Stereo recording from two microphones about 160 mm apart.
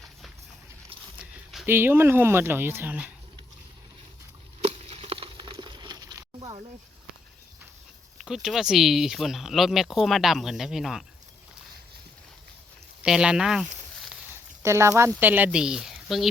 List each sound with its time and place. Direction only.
1.2 s a sound: centre (ahead or behind)
1.6 s speech: 15° right (ahead or behind)
4.6 s a sound: 40° right (ahead or behind); by 6.6 s 25° right (ahead or behind)
8.2 s speech: 5° right (ahead or behind)
13.0 s speech: 5° right (ahead or behind)
14.6 s speech: 15° right (ahead or behind); by 16.3 s centre (ahead or behind)